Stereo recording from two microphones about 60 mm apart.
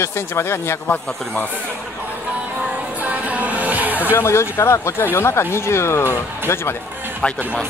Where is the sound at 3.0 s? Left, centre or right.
Right.